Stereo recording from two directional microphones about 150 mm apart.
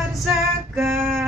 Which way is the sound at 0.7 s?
15° right (ahead or behind).